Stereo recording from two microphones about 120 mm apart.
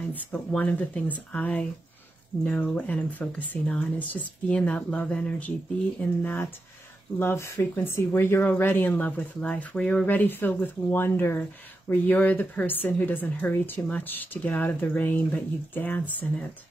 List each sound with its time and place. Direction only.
0.1 s speech: 15° left (ahead or behind)